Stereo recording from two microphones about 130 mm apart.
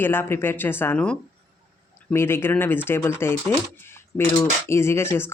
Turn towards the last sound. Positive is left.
turn(degrees=20)  # may be behind; listen again after turning